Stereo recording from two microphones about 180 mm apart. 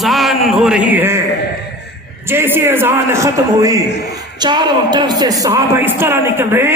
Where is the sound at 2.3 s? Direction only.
15° right (ahead or behind).